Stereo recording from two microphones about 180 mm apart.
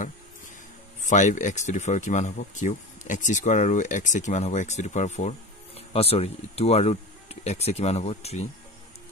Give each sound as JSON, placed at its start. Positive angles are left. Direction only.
{"t": 1.0, "sound": "speech", "side_deg": 45}